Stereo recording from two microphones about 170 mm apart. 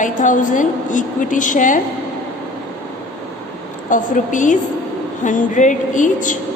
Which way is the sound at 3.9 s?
50° left (ahead or behind).